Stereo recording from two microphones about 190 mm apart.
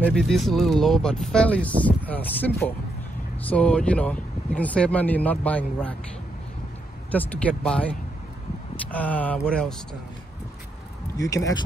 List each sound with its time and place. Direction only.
0.0 s speech: centre (ahead or behind)
7.1 s speech: 5° left (ahead or behind)
11.1 s speech: 20° left (ahead or behind)